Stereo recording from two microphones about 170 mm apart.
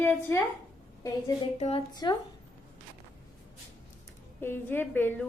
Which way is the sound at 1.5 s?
40° left (ahead or behind).